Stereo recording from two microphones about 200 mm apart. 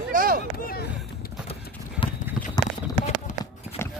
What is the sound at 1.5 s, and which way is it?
Clip-clop, 25° left (ahead or behind).